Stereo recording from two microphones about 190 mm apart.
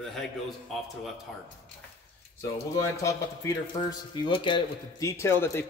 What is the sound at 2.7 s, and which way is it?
Speech, 15° left (ahead or behind).